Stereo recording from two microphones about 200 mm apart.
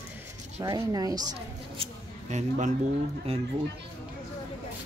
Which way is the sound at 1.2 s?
30° right (ahead or behind).